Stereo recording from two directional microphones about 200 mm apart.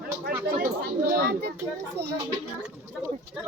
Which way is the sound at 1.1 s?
50° right (ahead or behind).